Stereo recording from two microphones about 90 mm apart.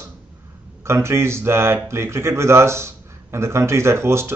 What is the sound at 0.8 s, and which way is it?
A man's voice, 30° right (ahead or behind).